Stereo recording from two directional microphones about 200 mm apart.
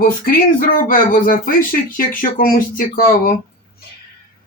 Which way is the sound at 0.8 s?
45° left (ahead or behind).